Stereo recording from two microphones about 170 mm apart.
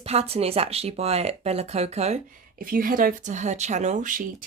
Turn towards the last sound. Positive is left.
turn(degrees=-50)  # may be behind; listen again after turning